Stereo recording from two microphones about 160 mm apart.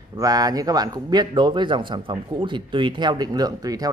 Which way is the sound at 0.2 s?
25° right (ahead or behind).